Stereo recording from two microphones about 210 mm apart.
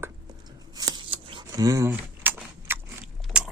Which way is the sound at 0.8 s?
20° right (ahead or behind).